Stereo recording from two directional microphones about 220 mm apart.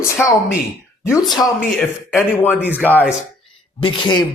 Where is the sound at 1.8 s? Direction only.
5° left (ahead or behind).